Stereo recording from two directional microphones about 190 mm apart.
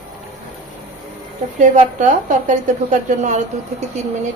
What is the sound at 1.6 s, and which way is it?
A woman's voice, 40° right (ahead or behind).